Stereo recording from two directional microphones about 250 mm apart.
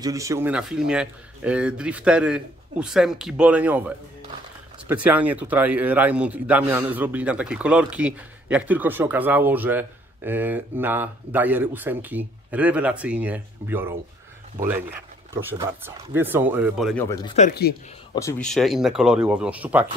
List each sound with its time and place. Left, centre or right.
0.0 s speech: centre
15.4 s speech: centre
17.4 s speech: left
18.4 s speech: centre